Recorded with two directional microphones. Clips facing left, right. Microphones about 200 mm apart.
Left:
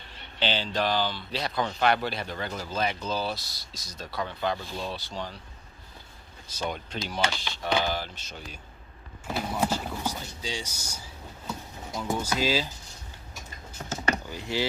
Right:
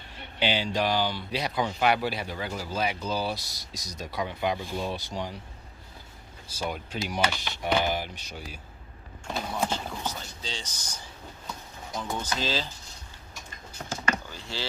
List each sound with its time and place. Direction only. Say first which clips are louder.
0.3 s speech: right 1 dB; 10° right (ahead or behind)
6.6 s speech: even; 10° right (ahead or behind)
9.2 s speech: left 2 dB; 5° left (ahead or behind)
14.3 s speech: left 7 dB; 15° left (ahead or behind)